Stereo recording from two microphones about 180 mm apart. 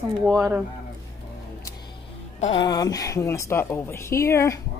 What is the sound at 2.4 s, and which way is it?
A woman's voice, 25° left (ahead or behind).